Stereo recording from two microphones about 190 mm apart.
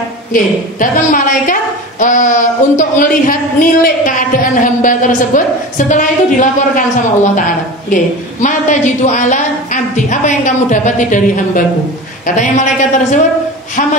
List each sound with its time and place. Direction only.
0.3 s a woman's voice: 45° left (ahead or behind)
7.9 s a woman's voice: 40° left (ahead or behind)